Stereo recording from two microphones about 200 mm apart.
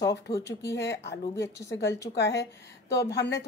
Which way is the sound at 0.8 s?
60° left (ahead or behind).